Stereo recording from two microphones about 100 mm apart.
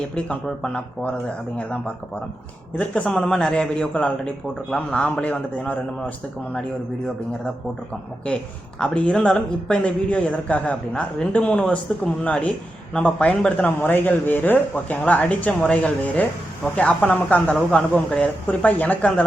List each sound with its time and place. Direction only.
0.2 s a man's voice: 10° left (ahead or behind)
8.8 s a man's voice: 10° left (ahead or behind)